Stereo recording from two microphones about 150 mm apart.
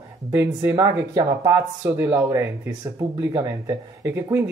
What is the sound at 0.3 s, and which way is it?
Speech, 15° right (ahead or behind).